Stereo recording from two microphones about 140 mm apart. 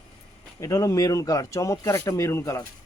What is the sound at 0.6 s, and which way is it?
Speech, 25° left (ahead or behind).